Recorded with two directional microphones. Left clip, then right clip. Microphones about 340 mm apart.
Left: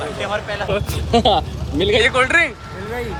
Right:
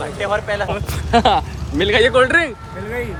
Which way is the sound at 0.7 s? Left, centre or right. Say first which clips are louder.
Even; centre.